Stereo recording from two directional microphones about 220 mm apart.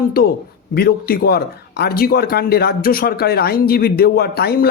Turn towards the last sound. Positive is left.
turn(degrees=45)  # may be behind; listen again after turning